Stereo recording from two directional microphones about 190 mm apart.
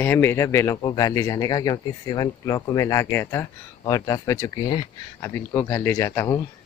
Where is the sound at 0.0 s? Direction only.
10° left (ahead or behind).